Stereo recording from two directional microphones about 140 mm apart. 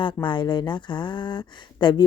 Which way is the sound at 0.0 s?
35° left (ahead or behind).